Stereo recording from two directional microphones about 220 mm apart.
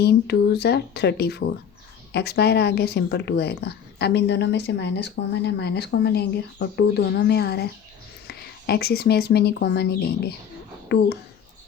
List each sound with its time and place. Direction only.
0.0 s speech: 50° left (ahead or behind)